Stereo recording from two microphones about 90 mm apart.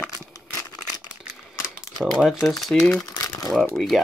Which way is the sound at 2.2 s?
Centre (ahead or behind).